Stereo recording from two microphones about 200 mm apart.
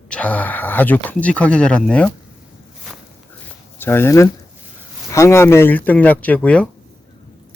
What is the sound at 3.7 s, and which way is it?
Speech, 10° left (ahead or behind).